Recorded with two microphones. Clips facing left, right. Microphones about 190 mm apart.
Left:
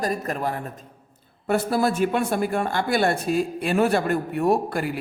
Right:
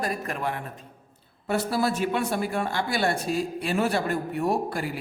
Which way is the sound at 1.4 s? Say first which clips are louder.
Left 3 dB; 50° left (ahead or behind).